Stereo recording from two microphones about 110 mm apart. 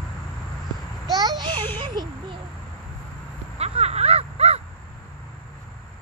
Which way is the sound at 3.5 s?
75° right (ahead or behind).